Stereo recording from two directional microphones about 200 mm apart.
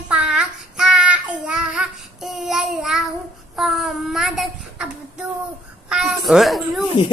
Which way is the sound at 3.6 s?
Centre (ahead or behind).